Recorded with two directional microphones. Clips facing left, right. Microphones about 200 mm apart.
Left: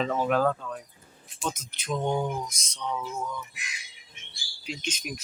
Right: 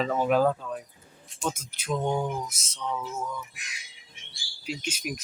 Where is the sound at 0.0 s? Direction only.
5° right (ahead or behind).